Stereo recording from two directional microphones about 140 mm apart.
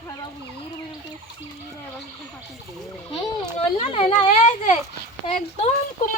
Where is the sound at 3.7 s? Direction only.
45° left (ahead or behind).